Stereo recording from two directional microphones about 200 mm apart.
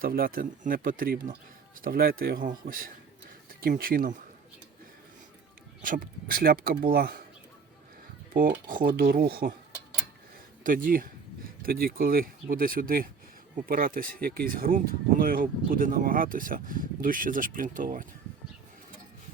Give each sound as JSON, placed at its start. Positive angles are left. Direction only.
{"t": 0.0, "sound": "speech", "side_deg": -45}
{"t": 5.8, "sound": "speech", "side_deg": -45}
{"t": 8.3, "sound": "speech", "side_deg": -45}
{"t": 10.6, "sound": "speech", "side_deg": -45}